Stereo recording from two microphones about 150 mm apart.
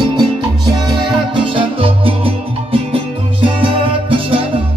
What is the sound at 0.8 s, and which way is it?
Music, 30° right (ahead or behind).